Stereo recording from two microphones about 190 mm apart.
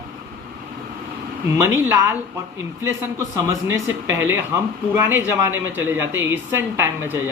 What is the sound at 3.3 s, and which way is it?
Speech, 15° right (ahead or behind).